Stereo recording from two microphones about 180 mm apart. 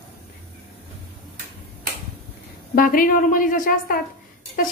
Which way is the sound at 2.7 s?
50° left (ahead or behind).